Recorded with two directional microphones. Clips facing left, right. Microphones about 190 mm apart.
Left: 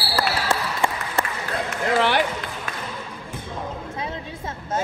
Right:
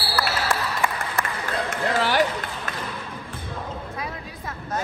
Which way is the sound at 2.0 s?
40° right (ahead or behind).